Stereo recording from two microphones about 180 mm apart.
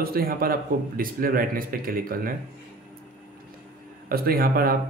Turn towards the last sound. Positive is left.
turn(degrees=-55)  # may be behind; listen again after turning